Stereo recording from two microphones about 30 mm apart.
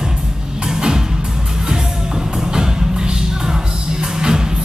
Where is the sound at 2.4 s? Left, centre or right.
Right.